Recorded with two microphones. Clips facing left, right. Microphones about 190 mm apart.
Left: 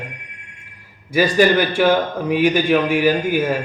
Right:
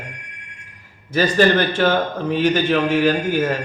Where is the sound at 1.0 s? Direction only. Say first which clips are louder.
Left 1 dB; 10° left (ahead or behind).